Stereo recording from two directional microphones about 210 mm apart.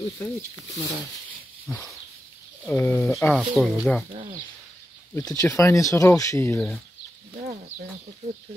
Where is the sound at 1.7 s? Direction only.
5° left (ahead or behind).